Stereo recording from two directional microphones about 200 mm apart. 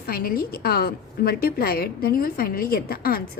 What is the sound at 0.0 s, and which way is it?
A woman's voice, 50° left (ahead or behind).